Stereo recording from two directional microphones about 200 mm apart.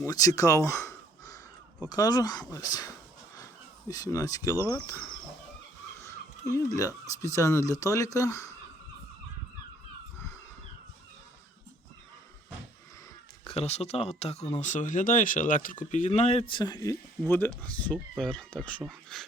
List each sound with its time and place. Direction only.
0.0 s speech: 15° left (ahead or behind)
3.8 s speech: 15° left (ahead or behind)
6.5 s speech: 15° left (ahead or behind)
13.4 s speech: 30° left (ahead or behind); by 19.2 s centre (ahead or behind)